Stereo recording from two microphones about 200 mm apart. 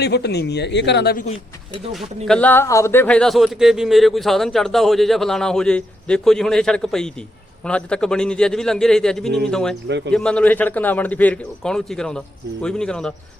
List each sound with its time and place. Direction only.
0.0 s speech: 55° left (ahead or behind)
1.9 s a man's voice: centre (ahead or behind)